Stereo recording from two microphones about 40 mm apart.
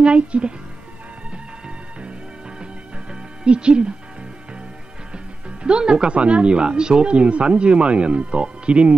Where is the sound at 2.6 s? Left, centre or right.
Right.